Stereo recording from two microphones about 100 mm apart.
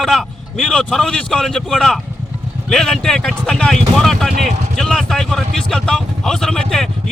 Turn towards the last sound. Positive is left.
turn(degrees=5)  # may be behind; listen again after turning